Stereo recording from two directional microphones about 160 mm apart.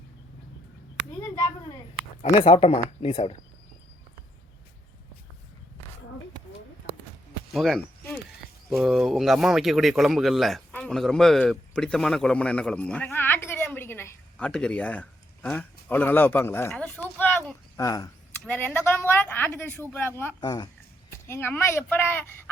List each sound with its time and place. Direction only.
2.4 s speech: 40° left (ahead or behind)
7.5 s speech: centre (ahead or behind)
8.8 s speech: 5° right (ahead or behind); by 13.7 s 15° left (ahead or behind)
13.7 s a sound: 15° left (ahead or behind)
17.7 s speech: 20° left (ahead or behind)
20.4 s speech: 25° left (ahead or behind)
21.1 s speech: 15° left (ahead or behind)